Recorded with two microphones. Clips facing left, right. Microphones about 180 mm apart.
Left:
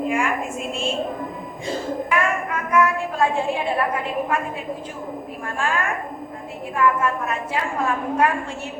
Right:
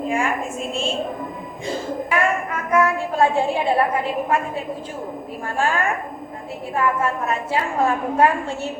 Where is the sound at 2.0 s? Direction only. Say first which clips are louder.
Right 3 dB; 30° right (ahead or behind).